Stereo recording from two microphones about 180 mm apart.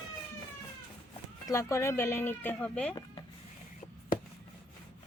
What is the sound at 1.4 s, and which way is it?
Speech, 15° left (ahead or behind).